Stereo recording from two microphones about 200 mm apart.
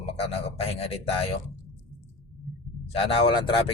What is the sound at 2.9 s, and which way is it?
Speech, 30° left (ahead or behind).